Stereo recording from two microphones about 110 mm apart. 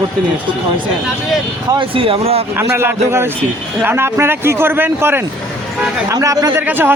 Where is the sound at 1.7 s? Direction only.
50° right (ahead or behind).